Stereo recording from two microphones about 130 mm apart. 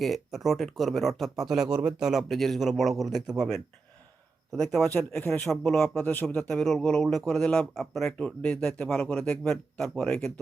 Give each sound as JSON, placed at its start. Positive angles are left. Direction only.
{"t": 0.0, "sound": "speech", "side_deg": 0}
{"t": 4.9, "sound": "speech", "side_deg": 15}
{"t": 5.5, "sound": "speech", "side_deg": 5}
{"t": 6.0, "sound": "speech", "side_deg": 15}